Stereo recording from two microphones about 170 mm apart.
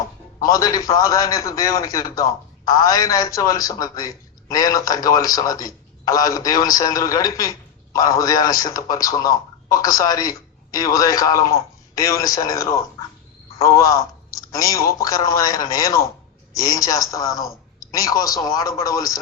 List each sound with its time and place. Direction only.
0.3 s a man's voice: 20° left (ahead or behind)